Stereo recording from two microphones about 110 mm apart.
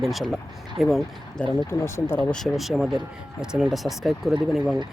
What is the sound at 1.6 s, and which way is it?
Speech, 25° left (ahead or behind).